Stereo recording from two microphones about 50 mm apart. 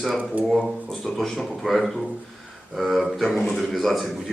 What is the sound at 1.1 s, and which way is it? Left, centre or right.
Speech, centre.